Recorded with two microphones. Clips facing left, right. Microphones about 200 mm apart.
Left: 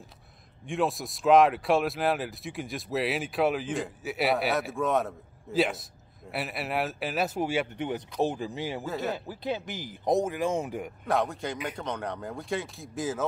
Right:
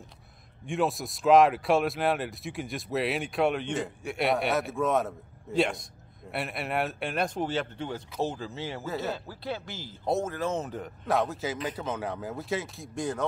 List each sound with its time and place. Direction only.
0.7 s speech: centre (ahead or behind); by 8.8 s 15° left (ahead or behind)
8.8 s speech: centre (ahead or behind)
9.1 s speech: 15° left (ahead or behind)
11.1 s speech: centre (ahead or behind)